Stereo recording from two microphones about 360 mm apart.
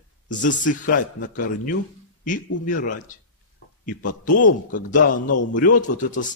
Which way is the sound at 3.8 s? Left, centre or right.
Left.